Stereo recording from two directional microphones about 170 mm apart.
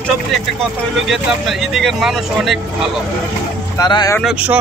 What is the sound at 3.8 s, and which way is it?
Speech, 25° left (ahead or behind).